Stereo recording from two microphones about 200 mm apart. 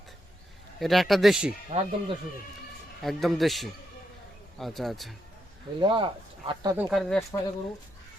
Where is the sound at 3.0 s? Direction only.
Centre (ahead or behind).